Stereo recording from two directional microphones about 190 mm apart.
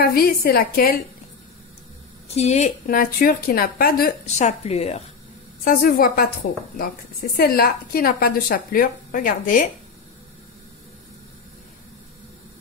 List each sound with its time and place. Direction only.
0.0 s a woman's voice: 55° left (ahead or behind)
2.2 s a woman's voice: 35° left (ahead or behind)
5.6 s a woman's voice: 50° left (ahead or behind)